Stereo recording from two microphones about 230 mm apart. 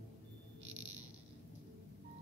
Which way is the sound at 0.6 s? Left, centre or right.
Right.